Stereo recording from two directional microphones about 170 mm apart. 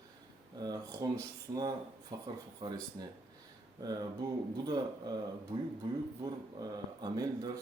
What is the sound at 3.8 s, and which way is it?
Speech, 25° right (ahead or behind).